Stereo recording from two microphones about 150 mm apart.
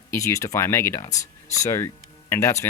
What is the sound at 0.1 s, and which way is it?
Speech, 20° left (ahead or behind).